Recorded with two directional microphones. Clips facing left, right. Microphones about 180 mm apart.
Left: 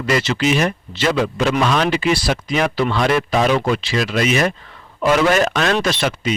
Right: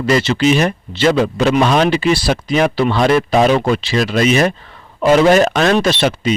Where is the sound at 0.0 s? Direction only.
30° right (ahead or behind).